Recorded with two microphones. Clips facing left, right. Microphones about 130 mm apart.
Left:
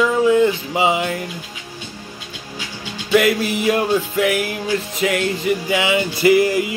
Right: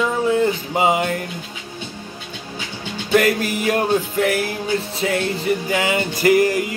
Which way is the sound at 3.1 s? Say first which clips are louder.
Left 1 dB; 45° right (ahead or behind).